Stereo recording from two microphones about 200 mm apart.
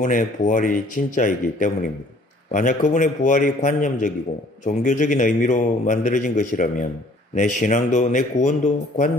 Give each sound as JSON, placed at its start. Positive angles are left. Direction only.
{"t": 0.0, "sound": "a man's voice", "side_deg": 35}